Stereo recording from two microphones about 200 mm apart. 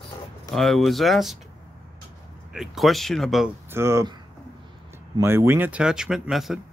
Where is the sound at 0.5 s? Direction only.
Centre (ahead or behind).